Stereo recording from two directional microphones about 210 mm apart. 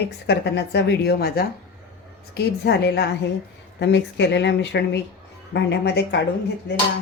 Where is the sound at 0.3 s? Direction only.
50° left (ahead or behind).